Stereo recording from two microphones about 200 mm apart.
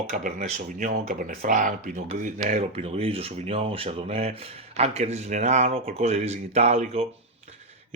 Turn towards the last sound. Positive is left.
turn(degrees=-30)  # may be behind; listen again after turning